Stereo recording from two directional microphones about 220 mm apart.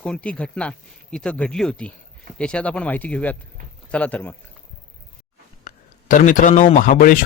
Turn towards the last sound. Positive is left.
turn(degrees=40)  # may be behind; listen again after turning